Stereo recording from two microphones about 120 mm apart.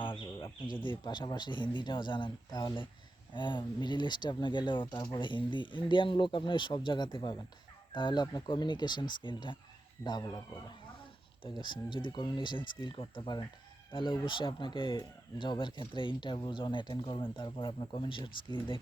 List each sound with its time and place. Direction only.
0.0 s speech: 45° left (ahead or behind)
11.4 s speech: 40° left (ahead or behind)